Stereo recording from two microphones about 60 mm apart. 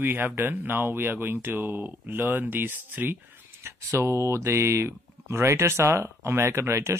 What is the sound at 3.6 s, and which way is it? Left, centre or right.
Speech, right.